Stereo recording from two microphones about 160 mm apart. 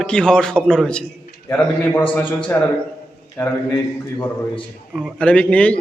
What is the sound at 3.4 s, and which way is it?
Speech, 15° left (ahead or behind).